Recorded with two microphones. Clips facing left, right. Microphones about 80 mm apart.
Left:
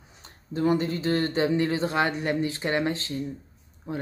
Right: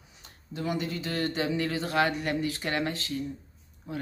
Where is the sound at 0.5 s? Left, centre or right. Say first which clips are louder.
Left 7 dB; left.